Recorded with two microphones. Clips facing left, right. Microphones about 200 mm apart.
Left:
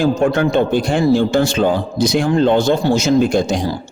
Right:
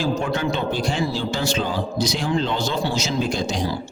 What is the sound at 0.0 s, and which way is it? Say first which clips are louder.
A man's voice: left 8 dB; 55° left (ahead or behind).